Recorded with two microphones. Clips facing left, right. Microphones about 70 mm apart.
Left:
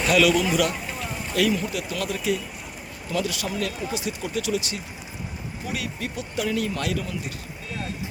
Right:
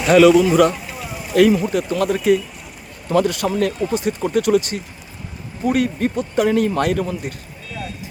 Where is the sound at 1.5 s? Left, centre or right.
Right.